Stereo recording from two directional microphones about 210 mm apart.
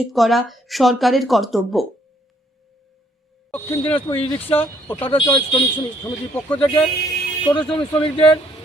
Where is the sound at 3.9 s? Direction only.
25° left (ahead or behind).